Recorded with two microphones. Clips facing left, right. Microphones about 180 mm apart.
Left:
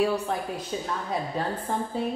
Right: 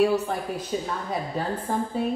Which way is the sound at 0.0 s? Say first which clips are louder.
Right 3 dB; centre (ahead or behind).